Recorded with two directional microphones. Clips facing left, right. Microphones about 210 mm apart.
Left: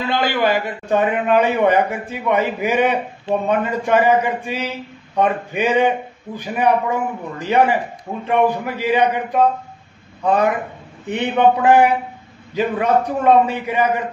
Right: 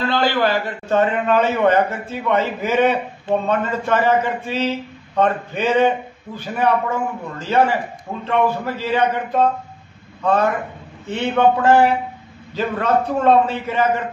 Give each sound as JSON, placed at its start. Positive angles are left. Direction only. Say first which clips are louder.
{"t": 0.0, "sound": "a man's voice", "louder": "even", "side_deg": 15}